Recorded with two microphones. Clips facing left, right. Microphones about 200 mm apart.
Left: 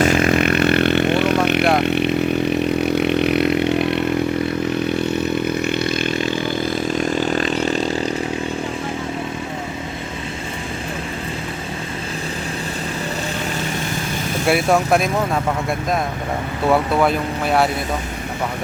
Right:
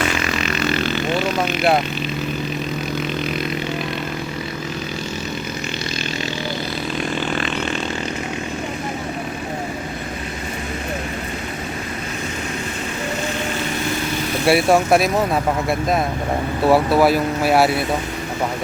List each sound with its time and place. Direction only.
0.0 s vehicle: 50° left (ahead or behind)
4.9 s a sound: 60° left (ahead or behind); by 8.1 s 35° left (ahead or behind)
14.4 s speech: centre (ahead or behind)
16.6 s speech: 5° right (ahead or behind)